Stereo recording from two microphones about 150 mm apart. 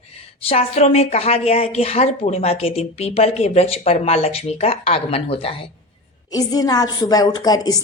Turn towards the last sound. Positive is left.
turn(degrees=25)  # may be behind; listen again after turning